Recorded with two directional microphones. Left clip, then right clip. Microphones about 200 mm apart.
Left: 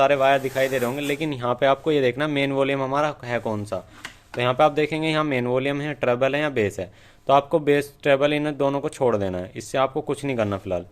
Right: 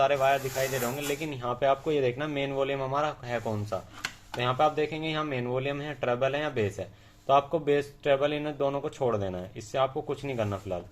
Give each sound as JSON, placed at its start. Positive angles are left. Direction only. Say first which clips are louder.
{"t": 0.0, "sound": "speech", "louder": "left 6 dB", "side_deg": 60}